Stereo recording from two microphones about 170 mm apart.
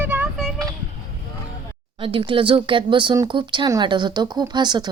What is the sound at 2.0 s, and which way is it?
Speech, 30° right (ahead or behind).